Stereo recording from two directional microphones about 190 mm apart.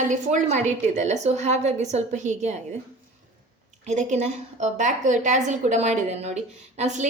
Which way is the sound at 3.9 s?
40° right (ahead or behind).